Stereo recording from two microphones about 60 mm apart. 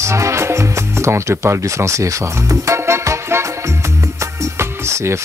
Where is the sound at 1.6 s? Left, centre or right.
Right.